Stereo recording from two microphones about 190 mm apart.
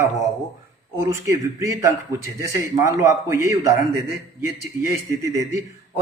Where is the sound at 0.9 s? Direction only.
15° right (ahead or behind).